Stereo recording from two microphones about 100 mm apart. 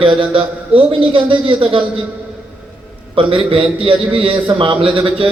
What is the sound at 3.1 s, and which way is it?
A man's voice, 60° right (ahead or behind).